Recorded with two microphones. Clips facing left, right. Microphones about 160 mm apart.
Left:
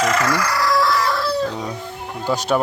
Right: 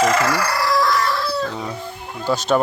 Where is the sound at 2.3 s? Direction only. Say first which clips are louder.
Right 1 dB; 10° left (ahead or behind).